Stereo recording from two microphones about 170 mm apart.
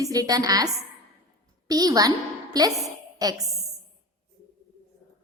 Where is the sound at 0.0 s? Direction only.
20° right (ahead or behind).